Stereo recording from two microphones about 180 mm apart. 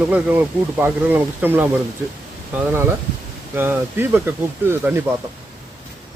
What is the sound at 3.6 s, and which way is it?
Speech, 10° right (ahead or behind).